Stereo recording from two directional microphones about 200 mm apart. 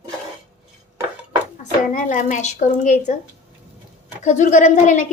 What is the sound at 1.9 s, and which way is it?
A woman's voice, 40° left (ahead or behind).